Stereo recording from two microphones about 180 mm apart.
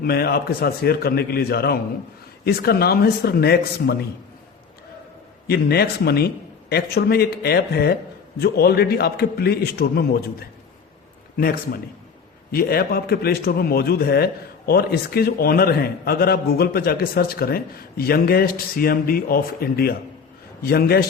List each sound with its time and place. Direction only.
0.0 s a man's voice: 60° left (ahead or behind)
5.5 s a man's voice: 60° left (ahead or behind)
11.3 s a man's voice: 55° left (ahead or behind)